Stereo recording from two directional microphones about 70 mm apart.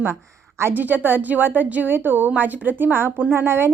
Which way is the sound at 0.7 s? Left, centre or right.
Right.